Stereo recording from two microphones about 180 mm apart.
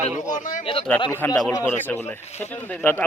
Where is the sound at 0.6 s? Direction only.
30° left (ahead or behind).